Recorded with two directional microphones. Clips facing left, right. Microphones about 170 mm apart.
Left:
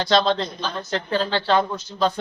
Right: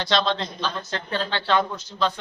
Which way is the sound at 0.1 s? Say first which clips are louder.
Left 4 dB; 40° left (ahead or behind).